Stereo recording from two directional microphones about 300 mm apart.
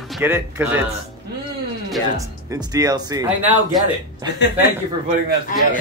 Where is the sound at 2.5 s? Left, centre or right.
Centre.